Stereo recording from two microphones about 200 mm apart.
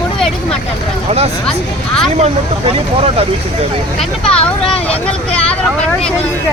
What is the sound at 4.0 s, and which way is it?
Speech, 5° left (ahead or behind).